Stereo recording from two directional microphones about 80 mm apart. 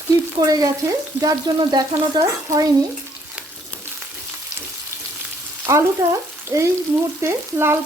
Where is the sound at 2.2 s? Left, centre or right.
Right.